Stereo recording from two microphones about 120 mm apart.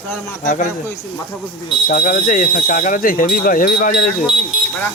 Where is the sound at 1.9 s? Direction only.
90° left.